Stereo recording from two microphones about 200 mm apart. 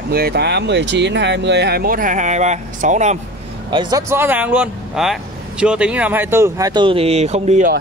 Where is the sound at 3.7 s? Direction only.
20° right (ahead or behind).